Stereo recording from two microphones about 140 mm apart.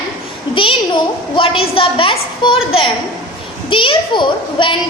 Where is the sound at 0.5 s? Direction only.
35° left (ahead or behind).